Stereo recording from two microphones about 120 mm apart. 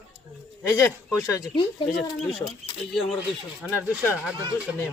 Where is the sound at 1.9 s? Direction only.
Centre (ahead or behind).